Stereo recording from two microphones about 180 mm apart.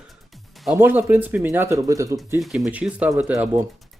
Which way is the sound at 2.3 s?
Centre (ahead or behind).